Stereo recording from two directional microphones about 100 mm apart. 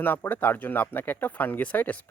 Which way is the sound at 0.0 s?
20° left (ahead or behind).